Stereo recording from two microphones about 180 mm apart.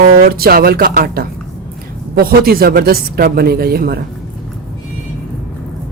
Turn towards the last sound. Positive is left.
turn(degrees=-60)  # may be behind; listen again after turning